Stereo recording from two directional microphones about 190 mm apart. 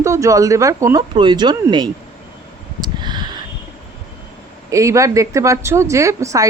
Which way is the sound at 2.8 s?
25° right (ahead or behind).